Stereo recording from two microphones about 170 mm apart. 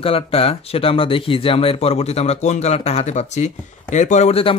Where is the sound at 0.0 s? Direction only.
35° left (ahead or behind).